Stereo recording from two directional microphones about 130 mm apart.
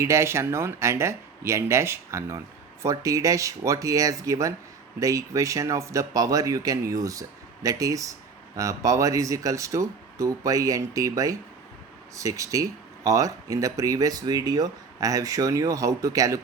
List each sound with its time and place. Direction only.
0.0 s speech: 20° right (ahead or behind)